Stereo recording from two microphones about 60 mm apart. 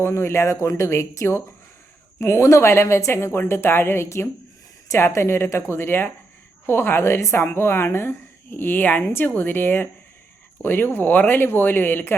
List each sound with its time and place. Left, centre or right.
0.0 s a woman's voice: left